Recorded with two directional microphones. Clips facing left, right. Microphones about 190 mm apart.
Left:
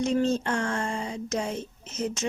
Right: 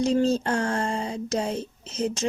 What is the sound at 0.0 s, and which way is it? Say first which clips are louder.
Speech: right 3 dB; 35° right (ahead or behind).